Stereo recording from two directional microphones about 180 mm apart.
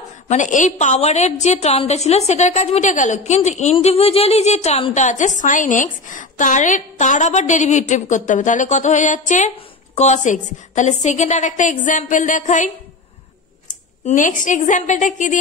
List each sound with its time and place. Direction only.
0.3 s a woman's voice: 45° left (ahead or behind)
14.0 s a woman's voice: 45° left (ahead or behind)